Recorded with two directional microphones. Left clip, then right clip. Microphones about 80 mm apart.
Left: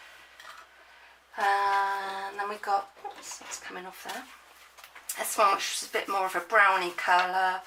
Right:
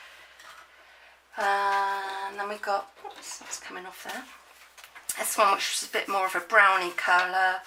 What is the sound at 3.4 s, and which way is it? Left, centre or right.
Speech, centre.